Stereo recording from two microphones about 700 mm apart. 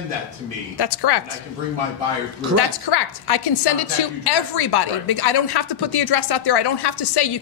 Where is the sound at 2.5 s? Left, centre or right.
Left.